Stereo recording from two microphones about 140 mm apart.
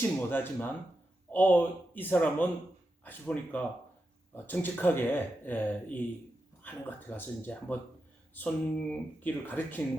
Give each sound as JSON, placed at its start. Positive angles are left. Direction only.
{"t": 0.0, "sound": "speech", "side_deg": 15}